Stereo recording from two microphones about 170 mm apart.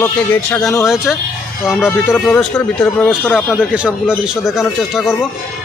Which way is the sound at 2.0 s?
5° left (ahead or behind).